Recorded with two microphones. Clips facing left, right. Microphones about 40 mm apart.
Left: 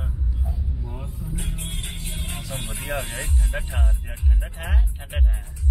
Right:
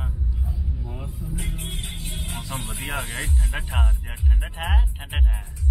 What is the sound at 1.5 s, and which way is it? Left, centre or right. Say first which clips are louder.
Speech: even; right.